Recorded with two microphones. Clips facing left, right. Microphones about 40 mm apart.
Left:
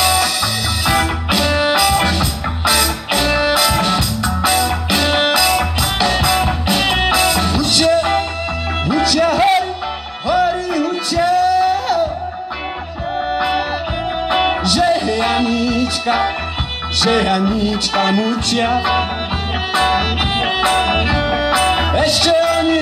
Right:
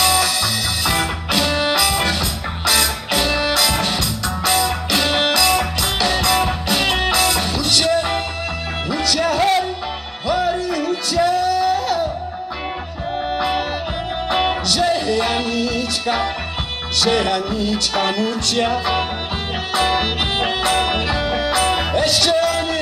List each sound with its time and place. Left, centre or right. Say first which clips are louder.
0.0 s music: left 2 dB; centre
13.3 s music: left 3 dB; centre
21.2 s music: left 3 dB; left
21.5 s music: left 3 dB; centre